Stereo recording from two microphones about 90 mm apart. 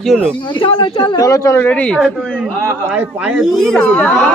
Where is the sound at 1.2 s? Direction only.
40° left (ahead or behind).